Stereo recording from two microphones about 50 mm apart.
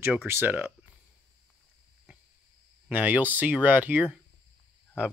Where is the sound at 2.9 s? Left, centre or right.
Right.